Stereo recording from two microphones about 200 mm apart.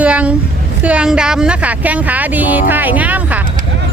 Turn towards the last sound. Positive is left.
turn(degrees=-10)  # may be behind; listen again after turning